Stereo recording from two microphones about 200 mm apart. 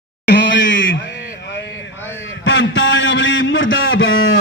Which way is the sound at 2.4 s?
70° left (ahead or behind).